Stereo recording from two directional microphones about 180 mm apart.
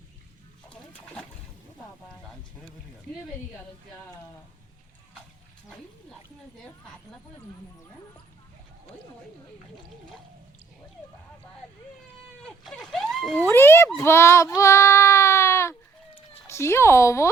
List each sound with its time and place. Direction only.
0.7 s pig: 5° left (ahead or behind)
5.6 s a sound: centre (ahead or behind)
12.4 s vehicle: centre (ahead or behind)
13.5 s a child's voice: 10° left (ahead or behind)